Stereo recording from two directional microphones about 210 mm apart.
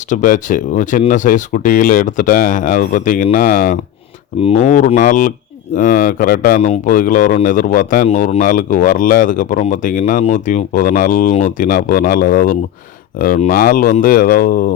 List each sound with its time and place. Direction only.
0.1 s speech: 35° left (ahead or behind)